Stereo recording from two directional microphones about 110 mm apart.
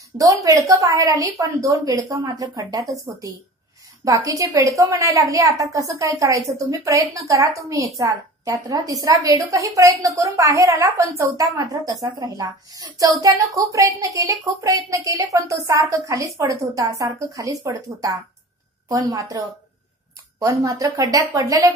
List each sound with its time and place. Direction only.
0.2 s a woman's voice: 30° right (ahead or behind)